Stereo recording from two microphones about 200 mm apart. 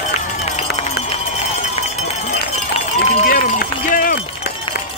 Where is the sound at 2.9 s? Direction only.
45° left (ahead or behind).